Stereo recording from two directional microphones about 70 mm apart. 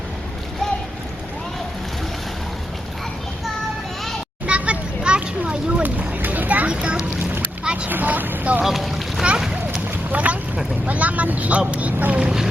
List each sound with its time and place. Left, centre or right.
4.4 s a sound: centre
7.6 s boat: centre
7.9 s vehicle: right
8.6 s boat: centre
10.1 s boat: right
10.8 s vehicle: right
11.7 s boat: centre